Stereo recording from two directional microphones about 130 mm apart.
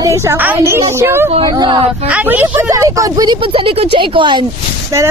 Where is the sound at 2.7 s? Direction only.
25° right (ahead or behind).